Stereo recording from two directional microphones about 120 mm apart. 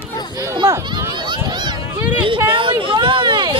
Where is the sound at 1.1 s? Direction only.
40° right (ahead or behind).